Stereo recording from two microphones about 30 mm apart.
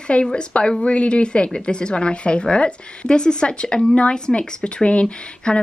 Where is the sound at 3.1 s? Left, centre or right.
Left.